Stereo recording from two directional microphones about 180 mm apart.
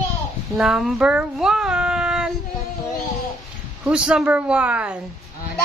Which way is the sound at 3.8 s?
5° right (ahead or behind).